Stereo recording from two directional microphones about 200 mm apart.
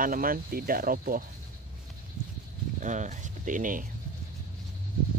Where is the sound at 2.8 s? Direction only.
40° right (ahead or behind).